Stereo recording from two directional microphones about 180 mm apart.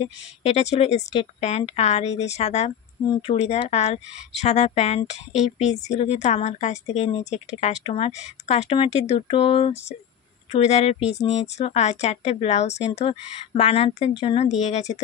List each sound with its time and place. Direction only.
0.0 s a woman's voice: 35° left (ahead or behind)